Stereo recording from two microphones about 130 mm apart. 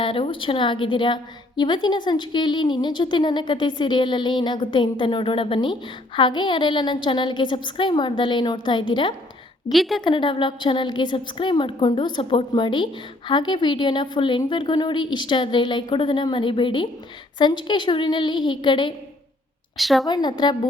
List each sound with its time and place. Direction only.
0.0 s a woman's voice: 40° left (ahead or behind)
9.7 s a woman's voice: centre (ahead or behind)
10.0 s a woman's voice: 35° left (ahead or behind)
19.7 s a woman's voice: centre (ahead or behind)
20.1 s a woman's voice: 35° left (ahead or behind)